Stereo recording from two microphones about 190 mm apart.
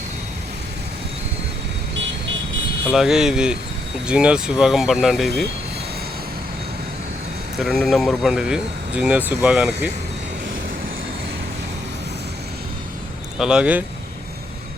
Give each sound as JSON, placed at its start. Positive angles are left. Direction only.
{"t": 2.9, "sound": "speech", "side_deg": 0}
{"t": 7.6, "sound": "speech", "side_deg": 0}
{"t": 13.4, "sound": "speech", "side_deg": -5}